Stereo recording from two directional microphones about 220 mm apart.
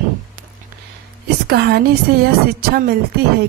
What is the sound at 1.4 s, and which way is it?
Speech, 45° right (ahead or behind).